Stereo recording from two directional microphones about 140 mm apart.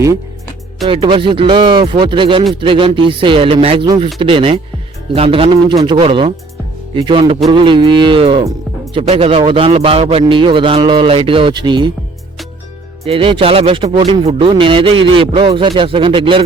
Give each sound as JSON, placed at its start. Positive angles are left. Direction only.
{"t": 0.9, "sound": "speech", "side_deg": -40}
{"t": 13.1, "sound": "speech", "side_deg": -40}